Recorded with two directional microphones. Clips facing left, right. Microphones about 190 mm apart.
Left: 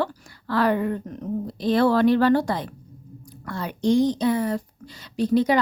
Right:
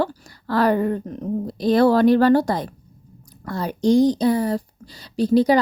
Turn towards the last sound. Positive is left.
turn(degrees=-35)  # may be behind; listen again after turning